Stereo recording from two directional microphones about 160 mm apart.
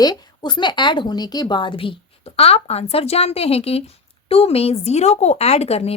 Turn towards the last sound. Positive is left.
turn(degrees=40)  # may be behind; listen again after turning